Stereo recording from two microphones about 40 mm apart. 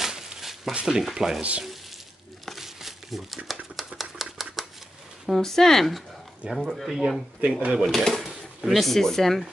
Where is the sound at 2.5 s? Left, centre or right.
Centre.